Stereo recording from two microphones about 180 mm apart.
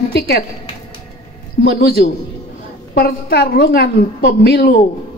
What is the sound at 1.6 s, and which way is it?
A woman's voice, 60° left (ahead or behind).